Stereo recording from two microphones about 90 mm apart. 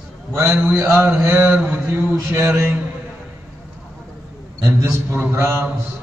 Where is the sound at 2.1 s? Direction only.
30° right (ahead or behind).